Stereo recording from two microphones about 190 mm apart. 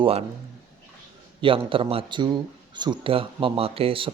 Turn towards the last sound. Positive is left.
turn(degrees=-30)  # may be behind; listen again after turning